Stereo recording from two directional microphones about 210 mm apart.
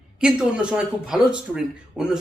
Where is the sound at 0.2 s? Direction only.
5° right (ahead or behind).